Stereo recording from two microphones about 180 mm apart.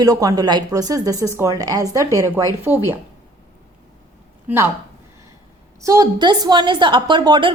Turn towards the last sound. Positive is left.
turn(degrees=-25)  # may be behind; listen again after turning